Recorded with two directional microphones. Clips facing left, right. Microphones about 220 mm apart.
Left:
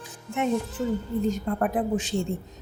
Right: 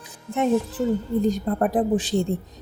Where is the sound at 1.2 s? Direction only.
35° right (ahead or behind).